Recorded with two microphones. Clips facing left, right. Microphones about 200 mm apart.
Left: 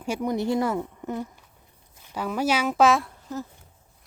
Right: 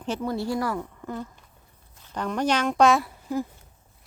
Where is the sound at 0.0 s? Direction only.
10° left (ahead or behind); by 3.4 s 10° right (ahead or behind).